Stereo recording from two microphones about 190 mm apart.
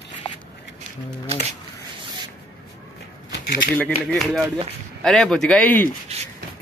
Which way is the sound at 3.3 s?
55° left (ahead or behind).